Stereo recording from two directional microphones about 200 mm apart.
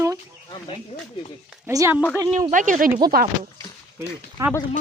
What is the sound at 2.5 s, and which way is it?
Speech, 40° right (ahead or behind).